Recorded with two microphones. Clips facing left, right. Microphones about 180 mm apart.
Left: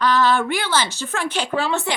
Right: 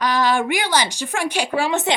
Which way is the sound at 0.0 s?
10° right (ahead or behind).